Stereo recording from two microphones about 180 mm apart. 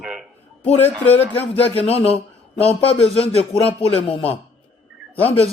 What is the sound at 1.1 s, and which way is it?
Speech, 35° left (ahead or behind).